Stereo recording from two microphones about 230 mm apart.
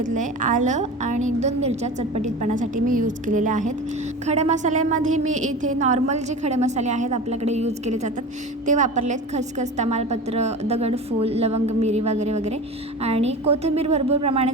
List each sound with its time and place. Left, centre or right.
0.0 s a woman's voice: right